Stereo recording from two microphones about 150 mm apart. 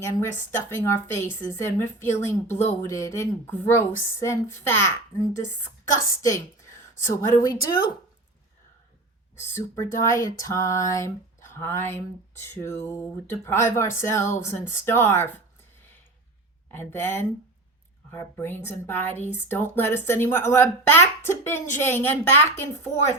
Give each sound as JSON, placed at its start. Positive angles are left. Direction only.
{"t": 0.0, "sound": "a woman's voice", "side_deg": 20}
{"t": 9.4, "sound": "a sound", "side_deg": 20}
{"t": 12.4, "sound": "speech", "side_deg": 15}
{"t": 16.7, "sound": "speech", "side_deg": 15}